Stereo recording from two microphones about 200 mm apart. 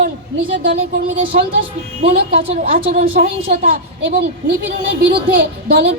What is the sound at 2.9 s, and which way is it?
Speech, 45° right (ahead or behind).